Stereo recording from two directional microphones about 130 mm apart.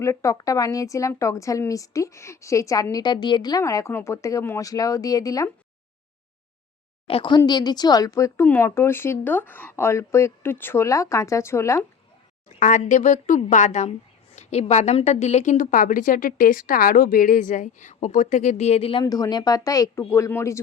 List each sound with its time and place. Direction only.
0.0 s speech: 20° left (ahead or behind)
7.1 s speech: 40° left (ahead or behind); by 11.9 s 20° left (ahead or behind)
12.5 s a woman's voice: 75° left (ahead or behind); by 19.0 s 45° left (ahead or behind)
19.0 s speech: 30° left (ahead or behind)